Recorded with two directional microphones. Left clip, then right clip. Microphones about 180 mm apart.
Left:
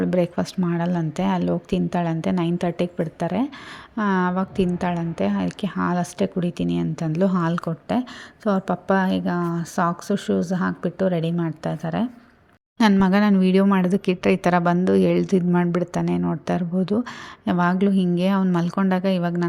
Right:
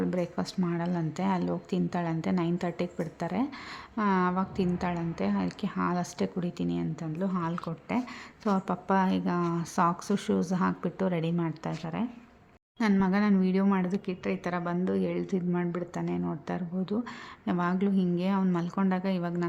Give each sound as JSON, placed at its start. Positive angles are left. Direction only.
{"t": 0.0, "sound": "a woman's voice", "side_deg": 30}